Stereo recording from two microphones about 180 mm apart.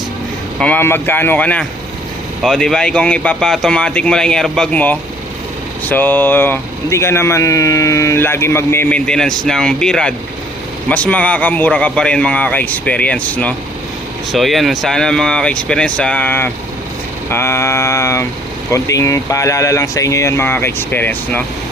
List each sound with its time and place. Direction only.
0.6 s speech: 10° left (ahead or behind)